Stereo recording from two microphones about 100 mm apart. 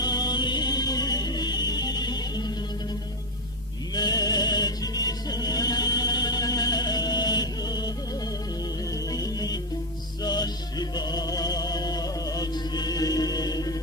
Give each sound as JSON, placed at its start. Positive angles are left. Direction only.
{"t": 0.0, "sound": "music", "side_deg": 45}
{"t": 3.9, "sound": "music", "side_deg": 40}
{"t": 9.1, "sound": "music", "side_deg": 40}